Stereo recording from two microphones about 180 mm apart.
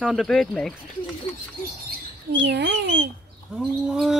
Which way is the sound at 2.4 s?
75° right (ahead or behind).